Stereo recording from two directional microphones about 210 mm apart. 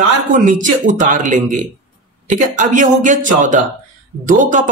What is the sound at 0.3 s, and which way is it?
Speech, 40° right (ahead or behind).